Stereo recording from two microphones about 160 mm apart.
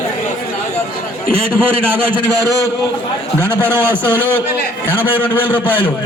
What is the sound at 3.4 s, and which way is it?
Speech, 15° right (ahead or behind).